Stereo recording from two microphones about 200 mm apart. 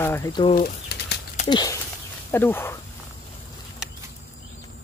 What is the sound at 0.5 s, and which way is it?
Pigeon, 50° left (ahead or behind).